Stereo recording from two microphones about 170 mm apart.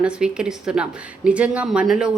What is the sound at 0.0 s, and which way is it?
Speech, 5° right (ahead or behind).